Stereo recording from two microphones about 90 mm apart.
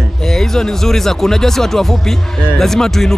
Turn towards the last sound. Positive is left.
turn(degrees=5)  # may be behind; listen again after turning